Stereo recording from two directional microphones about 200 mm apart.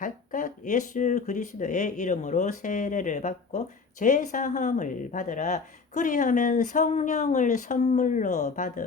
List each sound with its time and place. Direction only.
0.0 s speech: 40° left (ahead or behind)